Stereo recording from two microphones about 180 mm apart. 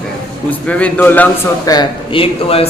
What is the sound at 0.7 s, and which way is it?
Speech, 10° left (ahead or behind).